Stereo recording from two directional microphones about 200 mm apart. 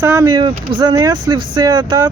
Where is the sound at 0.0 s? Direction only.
15° right (ahead or behind).